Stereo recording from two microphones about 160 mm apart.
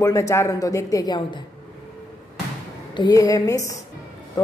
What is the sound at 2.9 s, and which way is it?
Speech, 25° left (ahead or behind).